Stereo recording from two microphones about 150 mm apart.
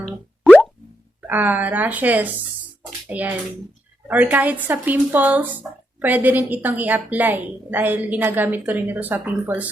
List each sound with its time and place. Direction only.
1.3 s a woman's voice: 10° right (ahead or behind)